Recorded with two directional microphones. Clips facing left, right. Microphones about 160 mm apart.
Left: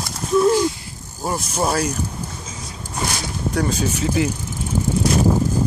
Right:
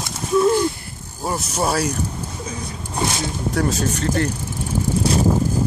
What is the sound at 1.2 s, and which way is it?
Speech, centre (ahead or behind).